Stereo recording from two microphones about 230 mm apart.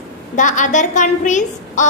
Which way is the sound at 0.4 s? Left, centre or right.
Left.